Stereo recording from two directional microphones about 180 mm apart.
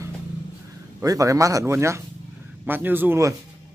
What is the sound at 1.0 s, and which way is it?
Speech, 20° right (ahead or behind).